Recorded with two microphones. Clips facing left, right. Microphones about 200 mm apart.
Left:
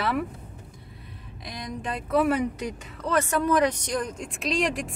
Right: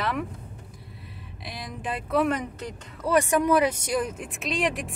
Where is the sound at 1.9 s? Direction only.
5° left (ahead or behind).